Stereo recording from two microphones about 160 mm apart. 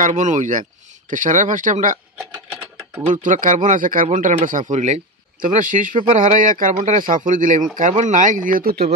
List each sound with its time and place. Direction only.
0.0 s speech: 50° right (ahead or behind)
3.1 s speech: 55° right (ahead or behind)